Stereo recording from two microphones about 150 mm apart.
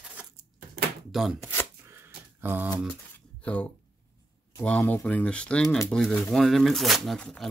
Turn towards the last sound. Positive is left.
turn(degrees=5)  # may be behind; listen again after turning